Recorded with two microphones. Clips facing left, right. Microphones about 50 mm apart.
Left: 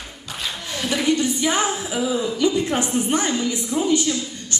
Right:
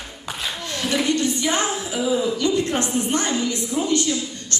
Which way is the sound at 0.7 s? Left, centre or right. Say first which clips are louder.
Left 1 dB; centre.